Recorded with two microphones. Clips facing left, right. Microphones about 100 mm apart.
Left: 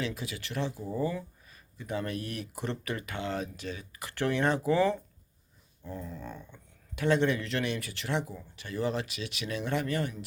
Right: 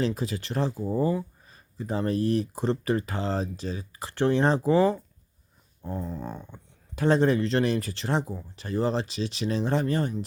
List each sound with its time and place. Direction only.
0.0 s speech: 35° right (ahead or behind)